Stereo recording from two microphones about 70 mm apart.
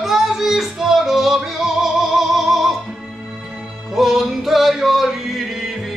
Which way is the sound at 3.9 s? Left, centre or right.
Centre.